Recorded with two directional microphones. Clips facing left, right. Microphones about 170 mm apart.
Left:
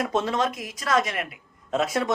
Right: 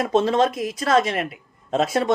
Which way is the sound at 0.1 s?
30° right (ahead or behind).